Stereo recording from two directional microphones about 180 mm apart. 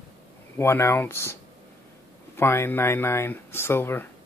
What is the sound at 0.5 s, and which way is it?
Speech, 15° left (ahead or behind).